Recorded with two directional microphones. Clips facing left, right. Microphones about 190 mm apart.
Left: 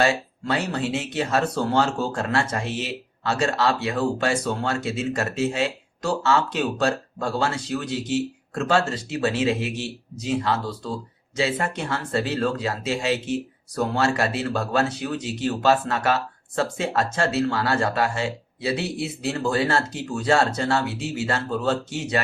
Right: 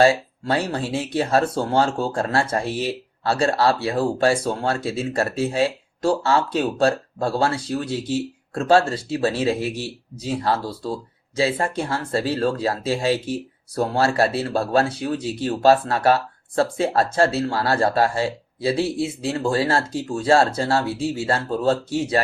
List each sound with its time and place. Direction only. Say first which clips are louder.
0.0 s speech: right 5 dB; 30° right (ahead or behind)